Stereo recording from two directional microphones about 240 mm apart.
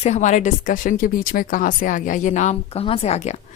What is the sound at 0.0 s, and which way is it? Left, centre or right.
A woman's voice, left.